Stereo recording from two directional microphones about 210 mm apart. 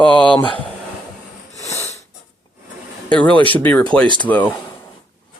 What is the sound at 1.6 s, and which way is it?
Wheeze, 15° left (ahead or behind).